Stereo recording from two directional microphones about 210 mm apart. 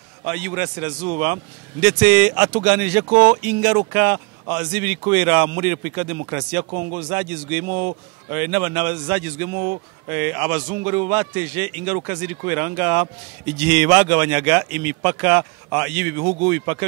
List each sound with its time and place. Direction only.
0.2 s speech: 10° right (ahead or behind)
7.6 s a man's voice: 40° right (ahead or behind)
8.3 s speech: 10° right (ahead or behind)